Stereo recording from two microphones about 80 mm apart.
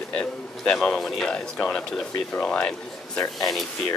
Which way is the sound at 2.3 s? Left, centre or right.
Centre.